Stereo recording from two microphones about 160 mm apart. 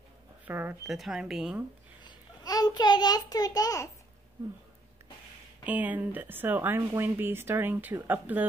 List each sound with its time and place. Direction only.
0.5 s speech: 10° right (ahead or behind)
2.0 s a child's voice: 25° left (ahead or behind)
5.7 s speech: 10° right (ahead or behind)